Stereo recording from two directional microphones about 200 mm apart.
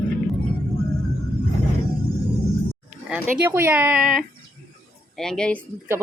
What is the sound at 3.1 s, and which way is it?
Speech, 10° right (ahead or behind).